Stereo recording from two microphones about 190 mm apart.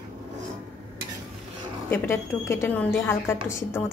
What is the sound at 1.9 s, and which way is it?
Speech, 10° left (ahead or behind).